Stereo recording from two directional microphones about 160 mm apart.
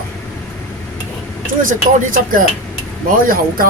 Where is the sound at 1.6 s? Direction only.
60° right (ahead or behind).